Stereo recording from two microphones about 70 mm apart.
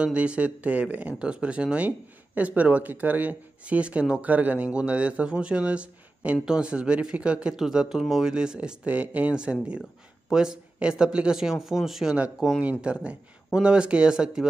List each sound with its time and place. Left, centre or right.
0.0 s speech: centre